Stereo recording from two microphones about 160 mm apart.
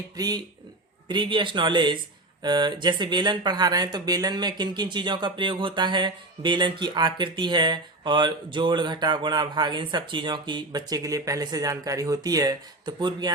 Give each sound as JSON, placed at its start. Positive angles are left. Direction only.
{"t": 0.2, "sound": "speech", "side_deg": -25}